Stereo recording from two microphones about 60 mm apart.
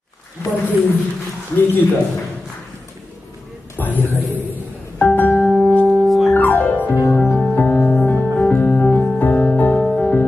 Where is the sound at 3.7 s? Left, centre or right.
Left.